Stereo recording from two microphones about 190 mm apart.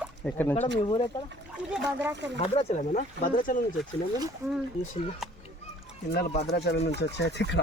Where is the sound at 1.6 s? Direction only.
5° right (ahead or behind).